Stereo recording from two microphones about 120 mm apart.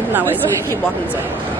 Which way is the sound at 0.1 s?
15° right (ahead or behind).